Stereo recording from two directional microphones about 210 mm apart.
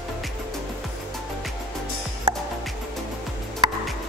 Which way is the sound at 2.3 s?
25° right (ahead or behind).